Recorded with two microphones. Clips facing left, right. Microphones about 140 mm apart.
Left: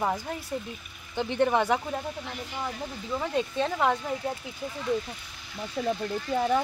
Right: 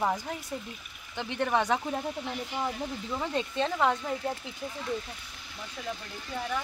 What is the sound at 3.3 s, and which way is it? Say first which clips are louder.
Speech: left 1 dB; 10° left (ahead or behind).